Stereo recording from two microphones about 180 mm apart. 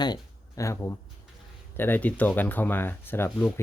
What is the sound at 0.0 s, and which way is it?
Speech, 20° left (ahead or behind).